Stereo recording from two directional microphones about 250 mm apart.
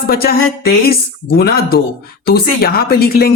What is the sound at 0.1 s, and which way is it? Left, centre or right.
Speech, left.